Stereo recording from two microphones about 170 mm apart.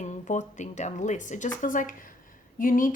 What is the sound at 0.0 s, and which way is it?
A woman's voice, 45° left (ahead or behind).